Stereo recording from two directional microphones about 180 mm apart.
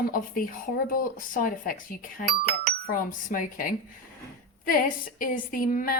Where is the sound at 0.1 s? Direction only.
50° left (ahead or behind).